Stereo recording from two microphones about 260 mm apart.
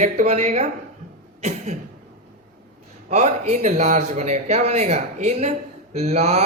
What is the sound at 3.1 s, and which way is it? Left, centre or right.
Speech, right.